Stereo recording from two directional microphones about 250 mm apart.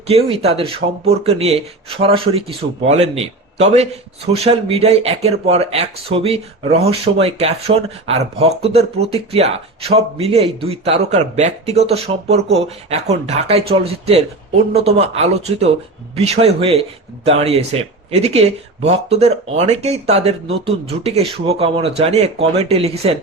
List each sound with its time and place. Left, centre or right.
0.1 s speech: right